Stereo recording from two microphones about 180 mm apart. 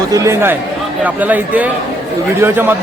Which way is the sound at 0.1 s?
15° right (ahead or behind).